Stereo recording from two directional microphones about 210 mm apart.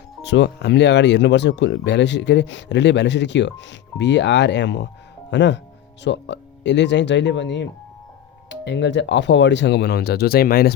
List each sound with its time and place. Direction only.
0.2 s speech: 55° left (ahead or behind)